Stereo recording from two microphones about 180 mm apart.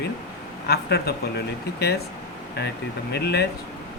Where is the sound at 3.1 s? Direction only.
65° left (ahead or behind).